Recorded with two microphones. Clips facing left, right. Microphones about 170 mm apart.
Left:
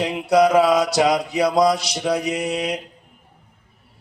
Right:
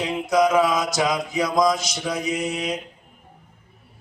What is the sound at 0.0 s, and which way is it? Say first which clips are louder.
Mantra: left 3 dB; 65° left (ahead or behind).